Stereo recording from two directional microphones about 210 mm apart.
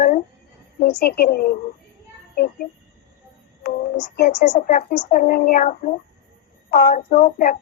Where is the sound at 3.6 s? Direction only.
40° left (ahead or behind).